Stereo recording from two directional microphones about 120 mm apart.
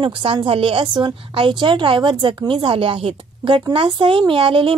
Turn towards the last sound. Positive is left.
turn(degrees=-45)  # may be behind; listen again after turning